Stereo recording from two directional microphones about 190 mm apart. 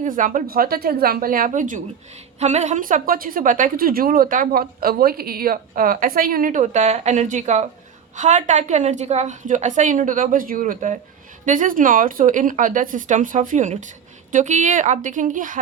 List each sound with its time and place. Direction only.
0.0 s a woman's voice: 45° right (ahead or behind)